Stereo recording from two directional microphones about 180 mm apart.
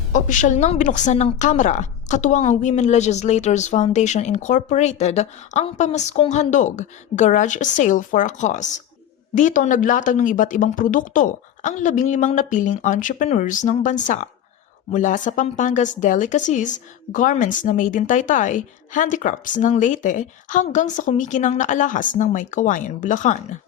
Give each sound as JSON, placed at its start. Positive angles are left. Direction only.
{"t": 0.1, "sound": "a woman's voice", "side_deg": 45}